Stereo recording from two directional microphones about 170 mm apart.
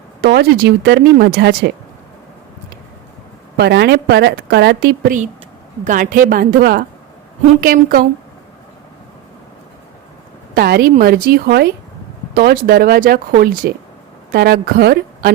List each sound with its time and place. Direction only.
0.2 s a woman's voice: 70° right (ahead or behind)
3.6 s a woman's voice: 75° right (ahead or behind); by 8.0 s 55° right (ahead or behind)
10.5 s speech: 65° right (ahead or behind)